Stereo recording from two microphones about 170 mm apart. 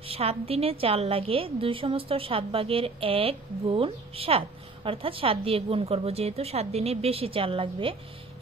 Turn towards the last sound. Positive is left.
turn(degrees=-30)  # may be behind; listen again after turning